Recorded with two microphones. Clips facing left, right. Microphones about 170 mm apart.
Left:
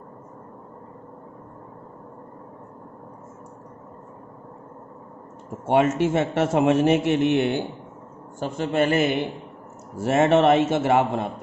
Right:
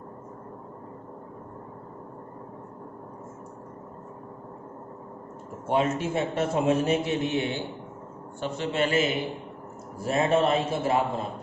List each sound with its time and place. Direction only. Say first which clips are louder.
5.6 s a man's voice: left 6 dB; 75° left (ahead or behind)
8.4 s a man's voice: left 5 dB; 45° left (ahead or behind)
10.0 s a man's voice: left 5 dB; 75° left (ahead or behind)